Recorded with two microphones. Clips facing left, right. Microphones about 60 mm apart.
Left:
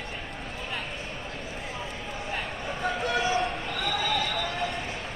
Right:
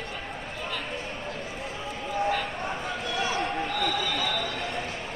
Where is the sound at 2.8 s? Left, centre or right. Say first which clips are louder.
Left 4 dB; left.